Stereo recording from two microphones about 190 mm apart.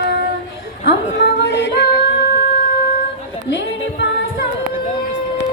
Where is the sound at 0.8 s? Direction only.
65° left (ahead or behind).